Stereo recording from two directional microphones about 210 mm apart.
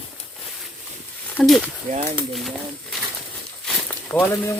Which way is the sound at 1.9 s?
25° right (ahead or behind).